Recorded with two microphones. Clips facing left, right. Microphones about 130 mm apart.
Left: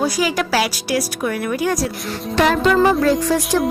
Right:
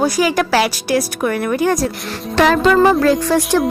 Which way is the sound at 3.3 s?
65° right (ahead or behind).